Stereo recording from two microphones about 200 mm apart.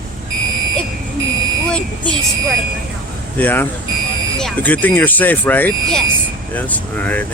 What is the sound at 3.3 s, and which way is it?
Speech, 10° left (ahead or behind).